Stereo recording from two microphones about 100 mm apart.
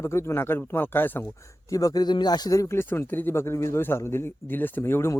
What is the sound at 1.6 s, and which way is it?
A man's voice, 35° left (ahead or behind).